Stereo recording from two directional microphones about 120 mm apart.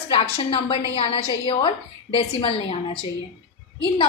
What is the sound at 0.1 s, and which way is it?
A woman's voice, 50° left (ahead or behind).